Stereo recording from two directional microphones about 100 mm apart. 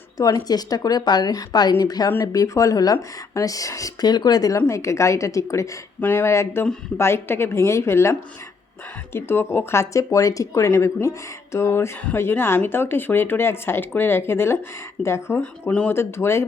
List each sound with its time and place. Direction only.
0.2 s speech: 40° left (ahead or behind)
6.0 s speech: 20° left (ahead or behind)
9.1 s speech: 25° left (ahead or behind)
15.4 s speech: 10° left (ahead or behind)
15.9 s speech: 25° left (ahead or behind)